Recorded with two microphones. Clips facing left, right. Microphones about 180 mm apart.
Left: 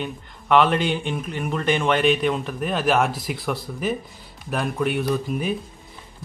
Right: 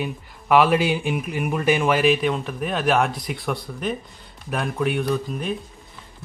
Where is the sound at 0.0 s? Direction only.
5° right (ahead or behind).